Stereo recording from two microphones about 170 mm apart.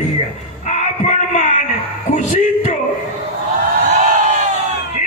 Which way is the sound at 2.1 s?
45° left (ahead or behind).